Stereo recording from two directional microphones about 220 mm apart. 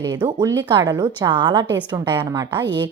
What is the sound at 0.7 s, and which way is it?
A woman's voice, 20° right (ahead or behind).